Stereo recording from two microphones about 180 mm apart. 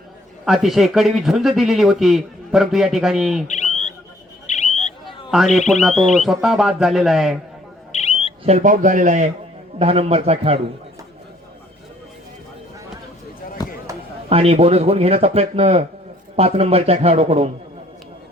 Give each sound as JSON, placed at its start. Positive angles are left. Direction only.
{"t": 0.4, "sound": "speech", "side_deg": 0}
{"t": 3.4, "sound": "bird", "side_deg": 40}
{"t": 4.4, "sound": "a sound", "side_deg": 40}
{"t": 5.3, "sound": "speech", "side_deg": 0}
{"t": 8.4, "sound": "speech", "side_deg": -40}
{"t": 13.6, "sound": "a sound", "side_deg": 20}
{"t": 14.3, "sound": "speech", "side_deg": -35}